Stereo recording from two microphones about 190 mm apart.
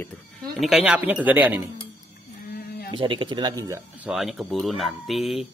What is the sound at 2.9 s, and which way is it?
Speech, 25° right (ahead or behind).